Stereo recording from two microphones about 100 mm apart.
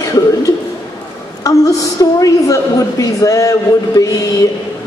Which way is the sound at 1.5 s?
35° left (ahead or behind).